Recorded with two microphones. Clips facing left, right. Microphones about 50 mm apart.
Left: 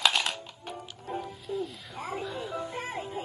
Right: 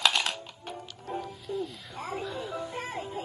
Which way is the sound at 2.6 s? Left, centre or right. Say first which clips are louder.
Even; left.